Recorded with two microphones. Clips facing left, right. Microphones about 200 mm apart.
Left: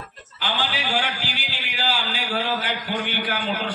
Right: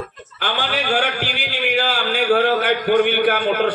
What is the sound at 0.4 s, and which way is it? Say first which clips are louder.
A man's voice: right 4 dB; 55° right (ahead or behind).